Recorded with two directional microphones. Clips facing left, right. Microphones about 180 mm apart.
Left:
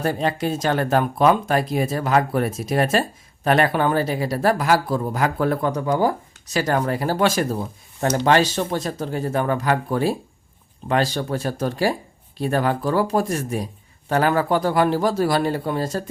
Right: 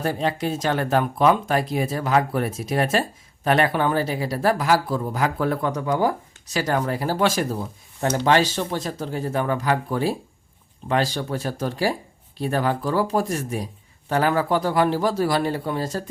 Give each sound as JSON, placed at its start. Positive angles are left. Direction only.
{"t": 0.0, "sound": "speech", "side_deg": 50}
{"t": 6.6, "sound": "speech", "side_deg": 45}